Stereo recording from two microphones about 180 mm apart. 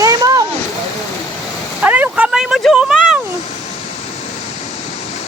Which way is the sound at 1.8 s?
10° right (ahead or behind).